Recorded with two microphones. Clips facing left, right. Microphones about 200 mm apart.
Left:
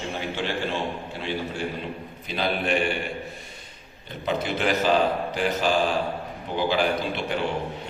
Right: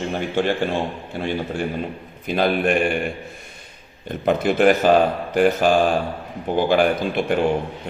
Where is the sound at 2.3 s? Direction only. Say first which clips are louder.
Right 6 dB; 55° right (ahead or behind).